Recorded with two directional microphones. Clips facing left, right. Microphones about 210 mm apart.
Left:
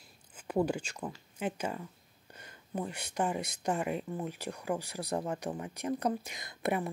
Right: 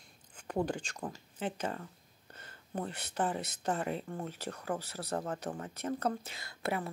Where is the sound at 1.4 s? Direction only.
10° left (ahead or behind).